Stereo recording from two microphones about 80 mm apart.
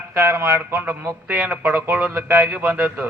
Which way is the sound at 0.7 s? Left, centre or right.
Right.